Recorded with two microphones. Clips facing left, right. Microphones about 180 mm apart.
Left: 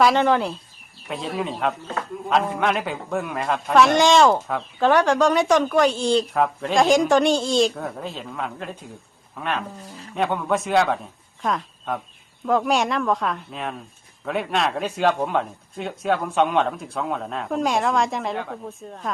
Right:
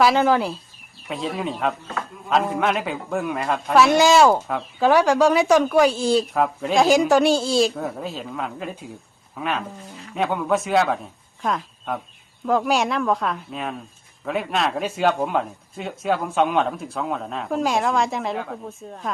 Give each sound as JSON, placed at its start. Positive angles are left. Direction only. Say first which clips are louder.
{"t": 0.0, "sound": "a man's voice", "louder": "even", "side_deg": 0}